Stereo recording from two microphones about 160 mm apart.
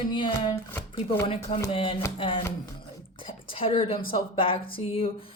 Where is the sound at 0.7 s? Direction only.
15° left (ahead or behind).